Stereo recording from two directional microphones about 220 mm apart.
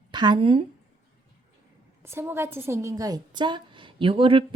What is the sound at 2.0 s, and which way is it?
A woman's voice, 10° right (ahead or behind).